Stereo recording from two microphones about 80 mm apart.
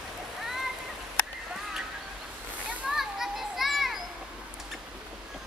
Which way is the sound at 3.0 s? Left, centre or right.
Centre.